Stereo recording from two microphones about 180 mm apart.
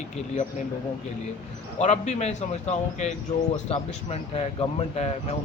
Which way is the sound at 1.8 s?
40° left (ahead or behind).